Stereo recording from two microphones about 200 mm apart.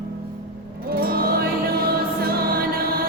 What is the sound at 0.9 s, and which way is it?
Music, 50° right (ahead or behind).